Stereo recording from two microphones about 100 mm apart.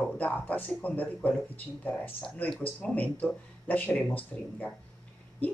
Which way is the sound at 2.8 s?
15° left (ahead or behind).